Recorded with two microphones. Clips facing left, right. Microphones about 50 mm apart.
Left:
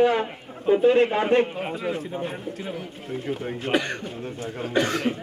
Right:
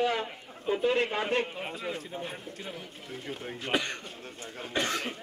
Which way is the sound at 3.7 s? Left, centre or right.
Left.